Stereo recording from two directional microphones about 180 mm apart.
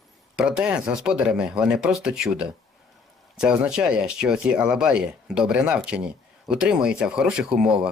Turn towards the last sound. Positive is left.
turn(degrees=-5)  # may be behind; listen again after turning